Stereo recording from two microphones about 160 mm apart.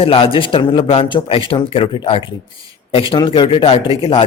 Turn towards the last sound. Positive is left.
turn(degrees=35)  # may be behind; listen again after turning